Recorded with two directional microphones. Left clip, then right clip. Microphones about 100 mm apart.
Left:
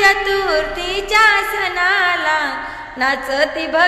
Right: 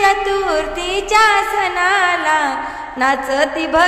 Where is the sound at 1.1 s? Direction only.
35° right (ahead or behind).